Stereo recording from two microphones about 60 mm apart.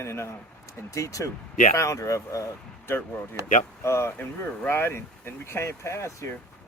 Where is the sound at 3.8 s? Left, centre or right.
Left.